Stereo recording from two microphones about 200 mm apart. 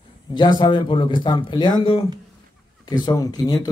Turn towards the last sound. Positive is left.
turn(degrees=20)  # may be behind; listen again after turning